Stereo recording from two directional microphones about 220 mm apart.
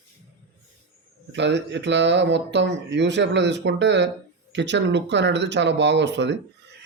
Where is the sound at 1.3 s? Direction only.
55° right (ahead or behind).